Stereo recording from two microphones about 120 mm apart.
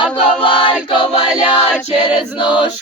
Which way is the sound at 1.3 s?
5° right (ahead or behind).